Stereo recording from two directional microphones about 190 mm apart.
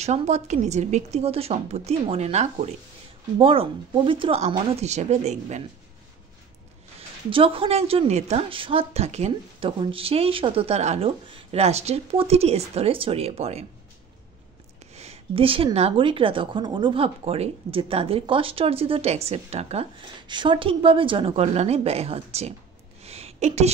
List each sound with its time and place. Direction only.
0.0 s a woman's voice: 35° right (ahead or behind)
7.2 s a woman's voice: 30° right (ahead or behind)
15.0 s a woman's voice: 30° right (ahead or behind)
23.0 s a sound: 35° right (ahead or behind)